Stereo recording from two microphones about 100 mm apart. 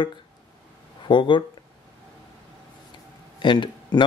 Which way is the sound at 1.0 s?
55° left (ahead or behind).